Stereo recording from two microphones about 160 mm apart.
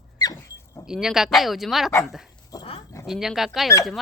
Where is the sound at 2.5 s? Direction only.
20° left (ahead or behind).